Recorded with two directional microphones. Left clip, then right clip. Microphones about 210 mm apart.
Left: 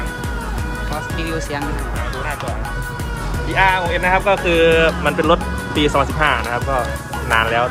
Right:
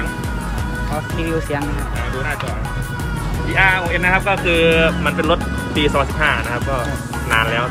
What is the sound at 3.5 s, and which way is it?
Speech, 40° left (ahead or behind).